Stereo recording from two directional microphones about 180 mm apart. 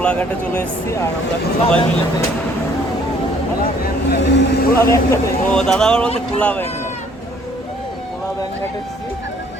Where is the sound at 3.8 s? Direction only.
65° left (ahead or behind).